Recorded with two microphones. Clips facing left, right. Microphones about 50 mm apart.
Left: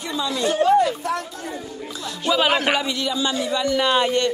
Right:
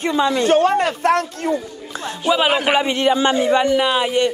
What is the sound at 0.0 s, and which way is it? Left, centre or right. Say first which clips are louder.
Speech: right 6 dB; right.